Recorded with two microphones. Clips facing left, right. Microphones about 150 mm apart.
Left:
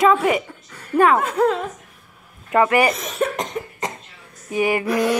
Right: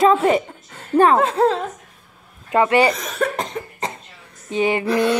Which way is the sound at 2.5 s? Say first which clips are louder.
Right 1 dB; 25° right (ahead or behind).